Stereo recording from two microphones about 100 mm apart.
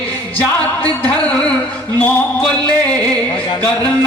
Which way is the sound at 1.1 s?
10° left (ahead or behind).